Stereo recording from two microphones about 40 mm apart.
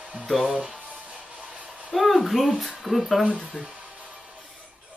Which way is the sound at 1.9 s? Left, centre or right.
Centre.